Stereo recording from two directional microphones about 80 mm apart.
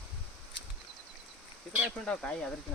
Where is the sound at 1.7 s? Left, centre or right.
Centre.